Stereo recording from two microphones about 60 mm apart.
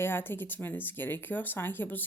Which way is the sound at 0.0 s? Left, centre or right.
Left.